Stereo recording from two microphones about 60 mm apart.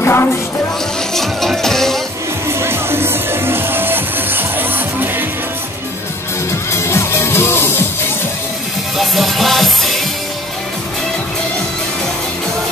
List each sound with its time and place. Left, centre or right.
0.0 s music: left
1.1 s music: centre
2.4 s music: right
6.7 s music: left
8.9 s music: centre